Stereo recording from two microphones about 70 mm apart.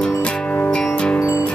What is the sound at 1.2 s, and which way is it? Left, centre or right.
Music, left.